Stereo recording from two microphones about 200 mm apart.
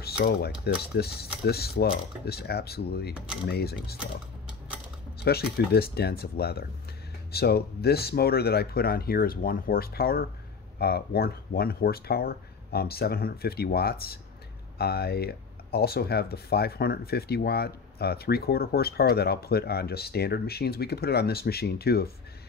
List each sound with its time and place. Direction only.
0.0 s cutlery: 50° left (ahead or behind)
0.9 s speech: 50° left (ahead or behind)
5.2 s speech: 55° left (ahead or behind)